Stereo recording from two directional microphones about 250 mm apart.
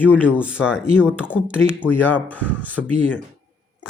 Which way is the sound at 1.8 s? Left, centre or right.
Centre.